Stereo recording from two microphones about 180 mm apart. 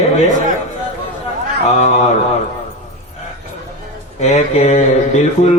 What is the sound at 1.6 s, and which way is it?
Speech, 40° left (ahead or behind).